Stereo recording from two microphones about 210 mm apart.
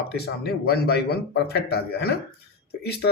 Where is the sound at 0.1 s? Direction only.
50° left (ahead or behind).